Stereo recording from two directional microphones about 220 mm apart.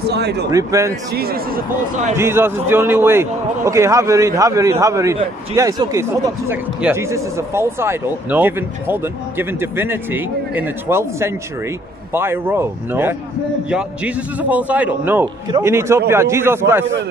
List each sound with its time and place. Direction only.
0.1 s speech: 50° right (ahead or behind)
0.5 s a man's voice: 15° right (ahead or behind)
1.1 s speech: 45° right (ahead or behind)
2.1 s a man's voice: 10° right (ahead or behind)